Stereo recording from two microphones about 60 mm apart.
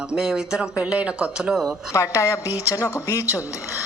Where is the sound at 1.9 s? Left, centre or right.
Left.